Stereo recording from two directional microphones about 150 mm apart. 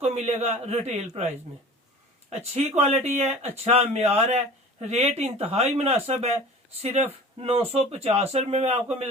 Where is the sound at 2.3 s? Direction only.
45° right (ahead or behind).